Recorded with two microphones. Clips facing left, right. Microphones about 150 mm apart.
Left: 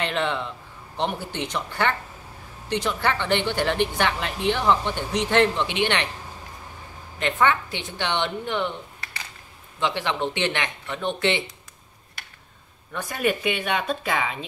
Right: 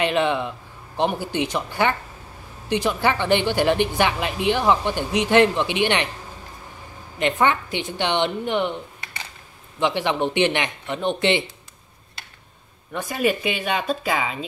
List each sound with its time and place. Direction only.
0.0 s a woman's voice: 15° right (ahead or behind)
7.2 s a woman's voice: 15° right (ahead or behind)
12.9 s speech: 5° right (ahead or behind)